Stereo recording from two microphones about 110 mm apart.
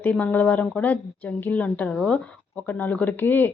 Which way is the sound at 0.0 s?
15° left (ahead or behind).